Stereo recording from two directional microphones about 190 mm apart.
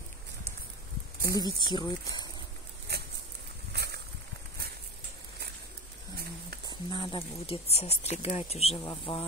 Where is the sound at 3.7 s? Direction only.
60° right (ahead or behind).